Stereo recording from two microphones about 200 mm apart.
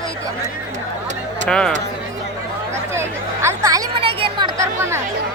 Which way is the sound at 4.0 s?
30° right (ahead or behind).